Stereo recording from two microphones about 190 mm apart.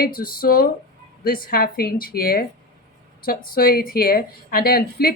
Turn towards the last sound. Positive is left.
turn(degrees=55)  # may be behind; listen again after turning